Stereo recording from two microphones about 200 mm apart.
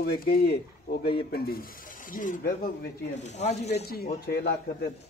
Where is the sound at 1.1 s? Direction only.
50° left (ahead or behind); by 3.8 s 35° left (ahead or behind).